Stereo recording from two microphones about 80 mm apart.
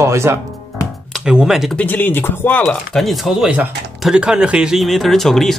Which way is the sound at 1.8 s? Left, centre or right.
Left.